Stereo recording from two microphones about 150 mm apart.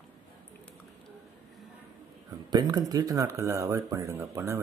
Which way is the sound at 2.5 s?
25° right (ahead or behind).